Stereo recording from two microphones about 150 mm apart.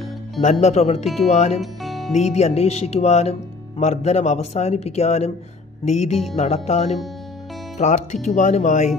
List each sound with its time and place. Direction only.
0.4 s speech: 50° left (ahead or behind)
1.0 s speech: centre (ahead or behind)
1.3 s speech: 50° left (ahead or behind)
1.6 s music: centre (ahead or behind)
2.1 s speech: 45° left (ahead or behind)
6.3 s speech: 45° left (ahead or behind)